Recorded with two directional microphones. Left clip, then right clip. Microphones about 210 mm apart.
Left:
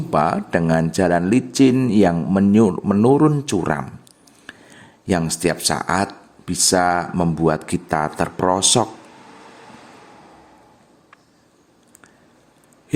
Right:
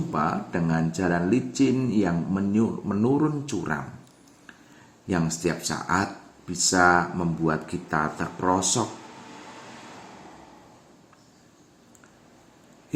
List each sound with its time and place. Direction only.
0.1 s speech: 50° left (ahead or behind)
5.0 s speech: 50° left (ahead or behind)